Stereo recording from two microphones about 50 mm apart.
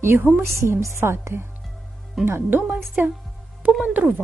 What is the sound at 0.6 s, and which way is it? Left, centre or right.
Speech, right.